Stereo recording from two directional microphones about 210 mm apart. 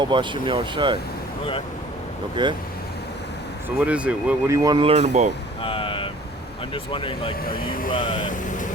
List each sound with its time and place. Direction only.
0.0 s speech: 20° right (ahead or behind)
2.3 s speech: 20° right (ahead or behind)
3.8 s speech: 5° right (ahead or behind); by 5.3 s 35° right (ahead or behind)
5.6 s vehicle: 25° left (ahead or behind)
6.9 s speech: 25° left (ahead or behind)
7.4 s speech: 45° left (ahead or behind)
8.3 s vehicle: 35° left (ahead or behind)